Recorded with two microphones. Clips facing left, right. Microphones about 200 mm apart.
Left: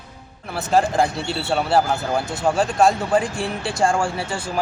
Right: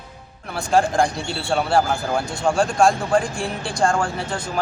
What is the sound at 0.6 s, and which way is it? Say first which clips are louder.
Speech: even; 5° left (ahead or behind).